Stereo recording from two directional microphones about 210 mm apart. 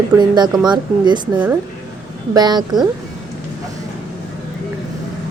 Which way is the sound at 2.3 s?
20° right (ahead or behind).